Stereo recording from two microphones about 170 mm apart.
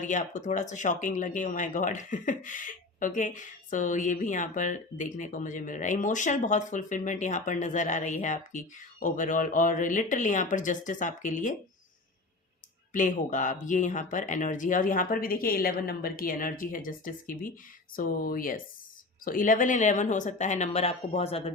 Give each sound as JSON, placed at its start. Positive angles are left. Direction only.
{"t": 0.0, "sound": "speech", "side_deg": 45}
{"t": 12.9, "sound": "speech", "side_deg": 50}